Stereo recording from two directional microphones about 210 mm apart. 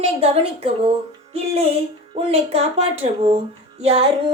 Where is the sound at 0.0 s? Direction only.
30° right (ahead or behind).